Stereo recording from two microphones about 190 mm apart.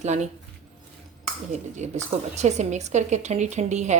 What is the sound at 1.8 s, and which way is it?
Speech, 40° right (ahead or behind).